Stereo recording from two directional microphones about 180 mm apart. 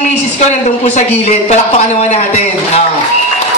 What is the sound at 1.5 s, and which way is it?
Speech, 40° left (ahead or behind).